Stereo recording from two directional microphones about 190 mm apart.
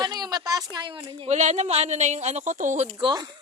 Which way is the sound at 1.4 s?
40° right (ahead or behind).